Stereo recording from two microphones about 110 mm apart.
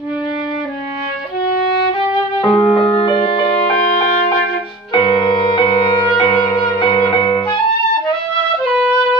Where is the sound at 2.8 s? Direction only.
50° left (ahead or behind).